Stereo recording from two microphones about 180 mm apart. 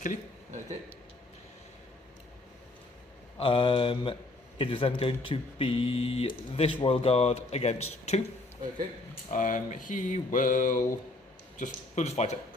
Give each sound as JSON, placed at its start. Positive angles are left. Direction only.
{"t": 3.3, "sound": "a man's voice", "side_deg": 30}
{"t": 9.3, "sound": "a sound", "side_deg": 45}
{"t": 11.6, "sound": "a man's voice", "side_deg": 40}